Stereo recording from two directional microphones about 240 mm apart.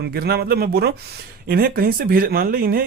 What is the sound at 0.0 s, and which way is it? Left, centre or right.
Speech, right.